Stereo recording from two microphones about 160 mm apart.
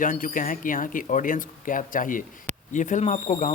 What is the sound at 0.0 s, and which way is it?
Speech, 55° left (ahead or behind).